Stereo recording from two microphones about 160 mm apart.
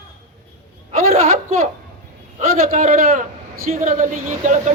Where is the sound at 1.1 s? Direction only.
45° right (ahead or behind).